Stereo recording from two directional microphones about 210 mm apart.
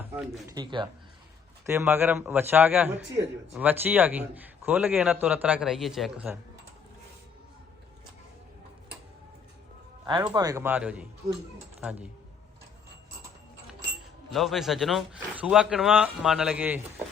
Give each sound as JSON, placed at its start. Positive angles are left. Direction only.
{"t": 0.0, "sound": "speech", "side_deg": -5}
{"t": 0.4, "sound": "a man's voice", "side_deg": -20}
{"t": 10.3, "sound": "a man's voice", "side_deg": -15}
{"t": 14.3, "sound": "speech", "side_deg": 0}